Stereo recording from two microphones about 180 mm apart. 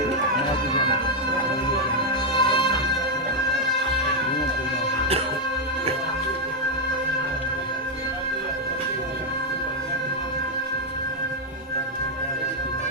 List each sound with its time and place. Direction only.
2.4 s music: 30° left (ahead or behind)